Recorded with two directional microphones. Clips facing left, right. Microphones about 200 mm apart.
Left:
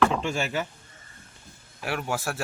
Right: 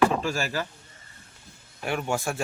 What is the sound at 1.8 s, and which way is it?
Speech, 5° left (ahead or behind).